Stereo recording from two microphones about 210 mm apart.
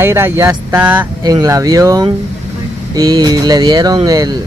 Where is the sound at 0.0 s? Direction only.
10° right (ahead or behind).